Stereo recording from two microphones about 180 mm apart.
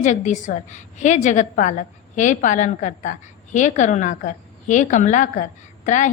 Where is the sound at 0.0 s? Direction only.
45° left (ahead or behind).